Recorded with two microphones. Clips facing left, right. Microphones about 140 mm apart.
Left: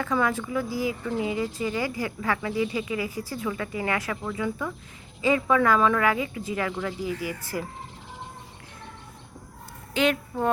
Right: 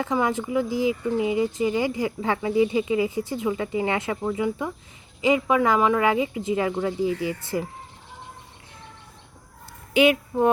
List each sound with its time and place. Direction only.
0.0 s speech: 20° right (ahead or behind)
9.9 s speech: 10° right (ahead or behind)